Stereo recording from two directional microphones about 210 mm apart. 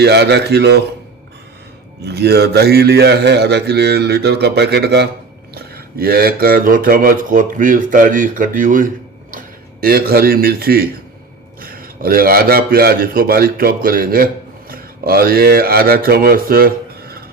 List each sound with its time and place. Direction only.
0.0 s a man's voice: 50° right (ahead or behind)
2.0 s a man's voice: 50° right (ahead or behind)